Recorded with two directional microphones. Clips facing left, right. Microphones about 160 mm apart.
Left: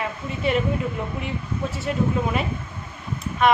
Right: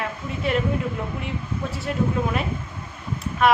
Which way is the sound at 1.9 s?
Centre (ahead or behind).